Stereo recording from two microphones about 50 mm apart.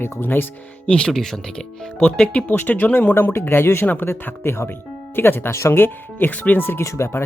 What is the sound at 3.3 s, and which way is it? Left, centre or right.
Speech, left.